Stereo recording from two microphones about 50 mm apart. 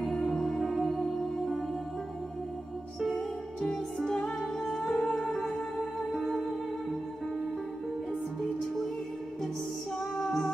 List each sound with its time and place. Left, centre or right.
0.1 s music: centre
3.2 s music: centre
4.4 s music: centre
10.1 s music: centre